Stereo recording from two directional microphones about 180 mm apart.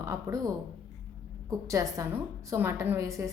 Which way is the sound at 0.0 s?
15° right (ahead or behind).